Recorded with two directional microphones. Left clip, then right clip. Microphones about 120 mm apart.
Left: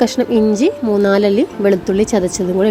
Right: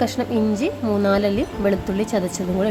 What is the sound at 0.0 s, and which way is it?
A woman's voice, 40° left (ahead or behind).